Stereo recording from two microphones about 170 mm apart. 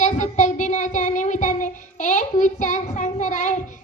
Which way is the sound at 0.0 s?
45° left (ahead or behind).